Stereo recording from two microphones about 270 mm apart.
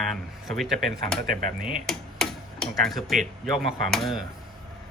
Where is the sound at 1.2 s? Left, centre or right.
Right.